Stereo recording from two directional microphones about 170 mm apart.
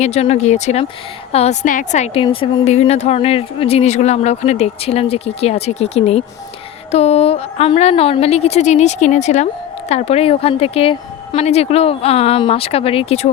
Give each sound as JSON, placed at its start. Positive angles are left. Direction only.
{"t": 0.0, "sound": "speech", "side_deg": 40}
{"t": 1.6, "sound": "a woman's voice", "side_deg": 50}
{"t": 2.2, "sound": "speech", "side_deg": 30}